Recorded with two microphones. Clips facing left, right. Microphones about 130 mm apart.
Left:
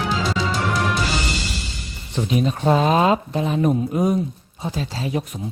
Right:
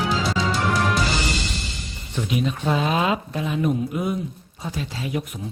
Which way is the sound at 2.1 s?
35° left (ahead or behind).